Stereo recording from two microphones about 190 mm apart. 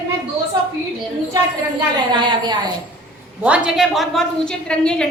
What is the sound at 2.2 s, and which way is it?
Speech, 25° right (ahead or behind).